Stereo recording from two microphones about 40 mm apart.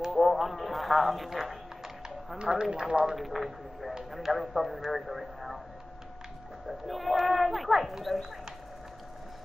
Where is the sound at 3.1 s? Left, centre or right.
Centre.